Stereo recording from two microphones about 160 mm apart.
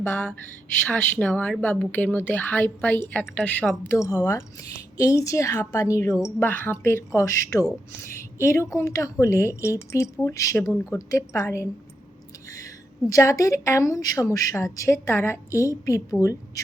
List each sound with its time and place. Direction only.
0.0 s a woman's voice: 10° left (ahead or behind)